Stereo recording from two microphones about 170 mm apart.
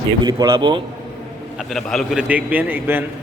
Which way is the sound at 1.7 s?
Centre (ahead or behind).